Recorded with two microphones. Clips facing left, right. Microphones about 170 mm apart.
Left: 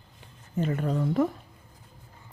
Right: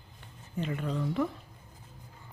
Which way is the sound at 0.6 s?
45° left (ahead or behind).